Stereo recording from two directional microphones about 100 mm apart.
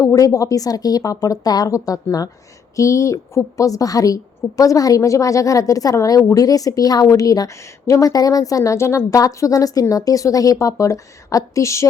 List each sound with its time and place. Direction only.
0.0 s a woman's voice: 35° left (ahead or behind)